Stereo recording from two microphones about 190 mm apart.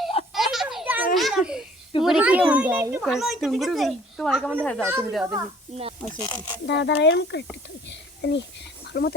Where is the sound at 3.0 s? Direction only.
Centre (ahead or behind).